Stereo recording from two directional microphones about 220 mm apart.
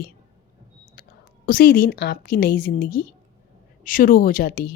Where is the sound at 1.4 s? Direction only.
40° left (ahead or behind).